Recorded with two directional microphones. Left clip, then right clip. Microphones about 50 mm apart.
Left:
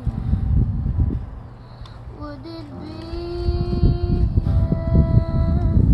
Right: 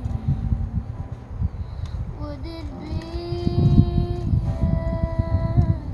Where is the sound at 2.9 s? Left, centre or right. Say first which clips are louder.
Left 2 dB; centre.